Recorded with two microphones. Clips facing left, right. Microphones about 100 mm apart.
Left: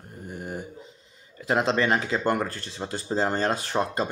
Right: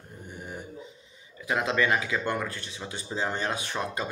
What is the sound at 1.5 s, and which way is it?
Speech, 30° left (ahead or behind).